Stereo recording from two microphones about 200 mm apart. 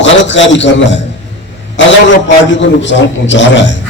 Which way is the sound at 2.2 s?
65° left (ahead or behind).